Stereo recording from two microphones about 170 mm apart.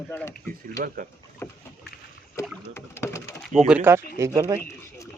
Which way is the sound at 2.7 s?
15° left (ahead or behind).